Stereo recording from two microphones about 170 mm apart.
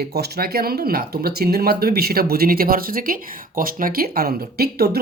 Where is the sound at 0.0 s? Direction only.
70° right (ahead or behind).